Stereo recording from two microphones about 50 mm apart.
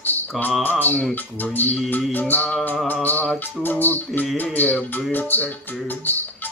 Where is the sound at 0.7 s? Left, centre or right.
Left.